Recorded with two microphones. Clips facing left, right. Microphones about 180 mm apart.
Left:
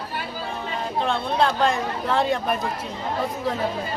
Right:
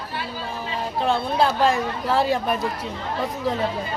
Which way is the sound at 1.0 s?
5° right (ahead or behind).